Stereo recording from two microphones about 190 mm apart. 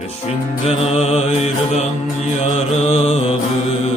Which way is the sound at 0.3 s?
35° left (ahead or behind).